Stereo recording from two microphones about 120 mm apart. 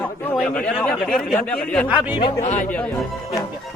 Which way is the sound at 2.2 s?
40° left (ahead or behind).